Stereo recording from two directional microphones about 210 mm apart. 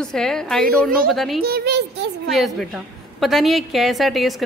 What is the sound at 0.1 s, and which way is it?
Speech, centre (ahead or behind).